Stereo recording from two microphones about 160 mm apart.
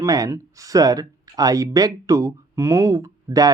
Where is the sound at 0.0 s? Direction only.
20° right (ahead or behind).